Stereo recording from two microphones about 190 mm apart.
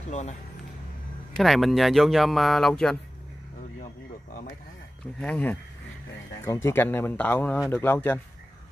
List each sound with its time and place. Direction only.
0.1 s speech: 35° left (ahead or behind)
1.3 s speech: centre (ahead or behind)
5.2 s speech: 5° left (ahead or behind)